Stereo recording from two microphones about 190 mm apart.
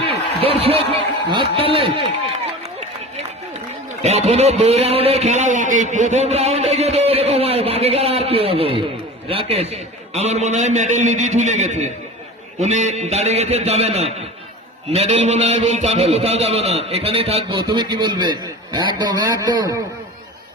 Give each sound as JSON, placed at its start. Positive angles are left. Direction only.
{"t": 0.0, "sound": "a man's voice", "side_deg": -30}
{"t": 4.0, "sound": "a man's voice", "side_deg": -35}